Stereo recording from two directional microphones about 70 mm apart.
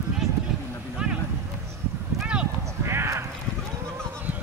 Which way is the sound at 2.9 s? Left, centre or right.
Right.